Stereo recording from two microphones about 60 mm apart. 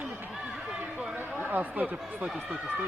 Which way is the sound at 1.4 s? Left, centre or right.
Right.